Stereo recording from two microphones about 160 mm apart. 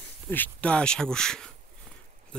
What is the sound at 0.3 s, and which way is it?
Speech, 10° left (ahead or behind).